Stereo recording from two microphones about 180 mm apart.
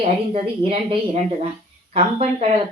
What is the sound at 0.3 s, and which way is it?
Speech, 35° right (ahead or behind).